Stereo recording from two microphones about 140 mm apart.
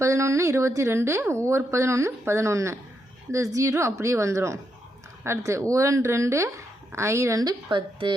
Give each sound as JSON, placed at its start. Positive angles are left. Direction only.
{"t": 0.0, "sound": "a woman's voice", "side_deg": -20}